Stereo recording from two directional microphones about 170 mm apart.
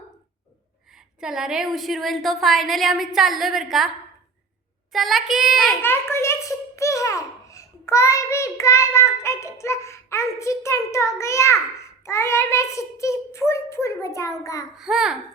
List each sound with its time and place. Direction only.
0.9 s a woman's voice: 5° right (ahead or behind)
5.8 s a child's voice: 15° left (ahead or behind)
14.8 s a woman's voice: centre (ahead or behind)